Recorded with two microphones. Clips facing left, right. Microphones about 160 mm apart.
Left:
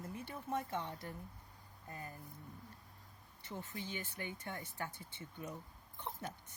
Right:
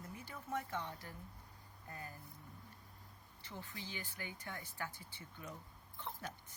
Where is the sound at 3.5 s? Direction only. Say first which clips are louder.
Left 4 dB; 20° left (ahead or behind).